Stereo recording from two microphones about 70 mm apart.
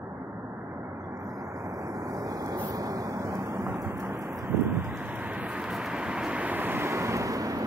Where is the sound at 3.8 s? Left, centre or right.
Right.